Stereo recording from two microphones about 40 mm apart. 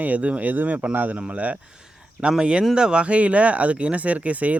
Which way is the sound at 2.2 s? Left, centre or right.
Right.